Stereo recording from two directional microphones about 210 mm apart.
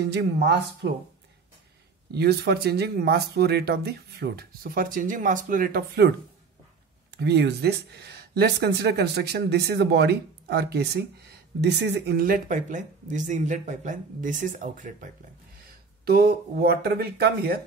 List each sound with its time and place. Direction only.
0.0 s speech: 55° right (ahead or behind)
2.0 s speech: 50° right (ahead or behind)
16.1 s speech: 50° right (ahead or behind)